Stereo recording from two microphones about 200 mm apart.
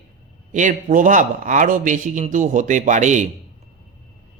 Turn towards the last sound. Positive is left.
turn(degrees=-35)  # may be behind; listen again after turning